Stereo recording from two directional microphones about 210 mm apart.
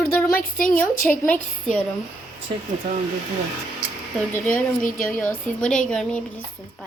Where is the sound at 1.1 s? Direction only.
5° left (ahead or behind).